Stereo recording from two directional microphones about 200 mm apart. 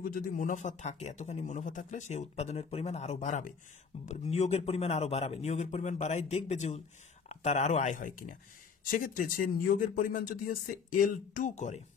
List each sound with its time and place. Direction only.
0.0 s speech: 45° left (ahead or behind)